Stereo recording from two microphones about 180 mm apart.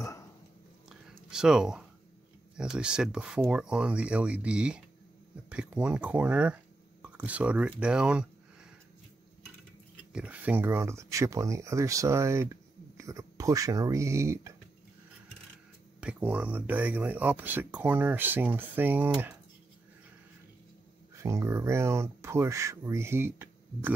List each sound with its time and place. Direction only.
0.0 s dog: 20° left (ahead or behind)
0.8 s whispering: 5° right (ahead or behind)
2.5 s speech: 5° right (ahead or behind)
10.1 s speech: 10° right (ahead or behind)
16.0 s speech: 10° right (ahead or behind)
21.2 s speech: 15° right (ahead or behind)